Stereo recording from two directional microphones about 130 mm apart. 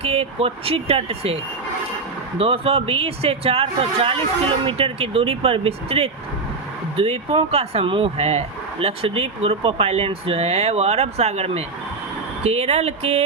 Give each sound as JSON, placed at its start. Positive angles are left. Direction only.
{"t": 0.0, "sound": "speech", "side_deg": -50}
{"t": 2.4, "sound": "speech", "side_deg": -45}